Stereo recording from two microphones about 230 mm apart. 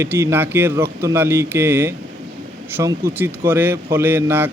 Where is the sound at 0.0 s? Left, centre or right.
Centre.